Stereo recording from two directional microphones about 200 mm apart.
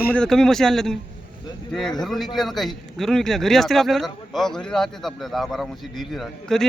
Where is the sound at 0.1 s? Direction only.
5° left (ahead or behind).